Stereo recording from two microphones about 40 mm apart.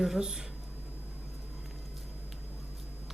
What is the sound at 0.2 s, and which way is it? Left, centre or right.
Speech, centre.